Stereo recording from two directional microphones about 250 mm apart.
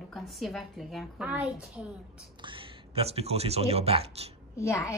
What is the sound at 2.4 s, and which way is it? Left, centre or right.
Speech, right.